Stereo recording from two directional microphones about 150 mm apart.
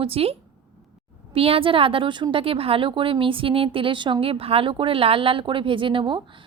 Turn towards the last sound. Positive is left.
turn(degrees=-35)  # may be behind; listen again after turning